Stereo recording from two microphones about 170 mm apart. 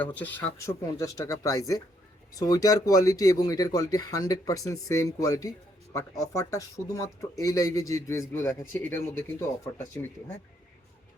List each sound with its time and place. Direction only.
0.0 s speech: 10° left (ahead or behind)